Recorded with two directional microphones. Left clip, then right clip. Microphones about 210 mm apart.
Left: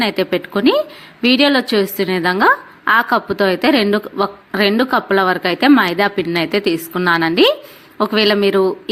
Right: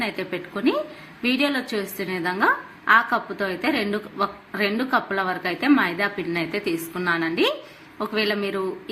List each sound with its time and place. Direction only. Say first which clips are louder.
0.0 s a woman's voice: left 10 dB; 45° left (ahead or behind)